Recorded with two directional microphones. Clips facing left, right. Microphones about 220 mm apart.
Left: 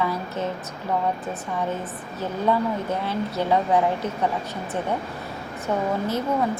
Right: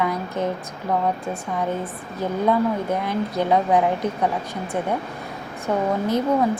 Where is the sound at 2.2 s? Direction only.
15° right (ahead or behind).